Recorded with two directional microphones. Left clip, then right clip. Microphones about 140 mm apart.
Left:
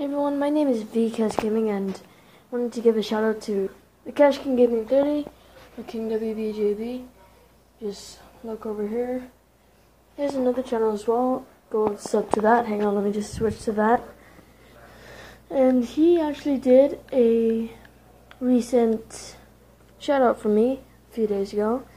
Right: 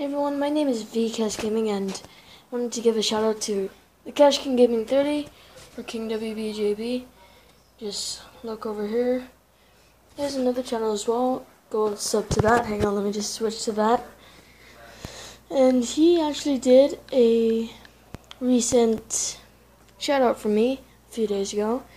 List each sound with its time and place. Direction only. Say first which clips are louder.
0.0 s a woman's voice: left 1 dB; 5° right (ahead or behind)
1.6 s a woman's voice: even; 20° right (ahead or behind)
8.5 s speech: even; 30° right (ahead or behind)
10.1 s a woman's voice: left 1 dB; 5° left (ahead or behind)
15.0 s a sound: right 1 dB; 25° right (ahead or behind)
15.8 s a woman's voice: even; 20° right (ahead or behind)